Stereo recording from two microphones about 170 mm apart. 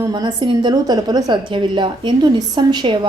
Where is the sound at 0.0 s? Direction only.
25° right (ahead or behind).